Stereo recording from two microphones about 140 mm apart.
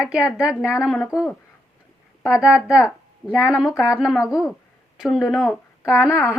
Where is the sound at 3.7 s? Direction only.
20° left (ahead or behind).